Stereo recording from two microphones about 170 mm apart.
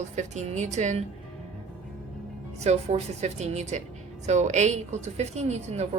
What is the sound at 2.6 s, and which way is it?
A woman's voice, 40° right (ahead or behind).